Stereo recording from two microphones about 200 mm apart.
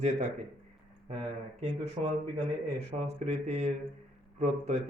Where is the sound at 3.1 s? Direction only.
35° right (ahead or behind).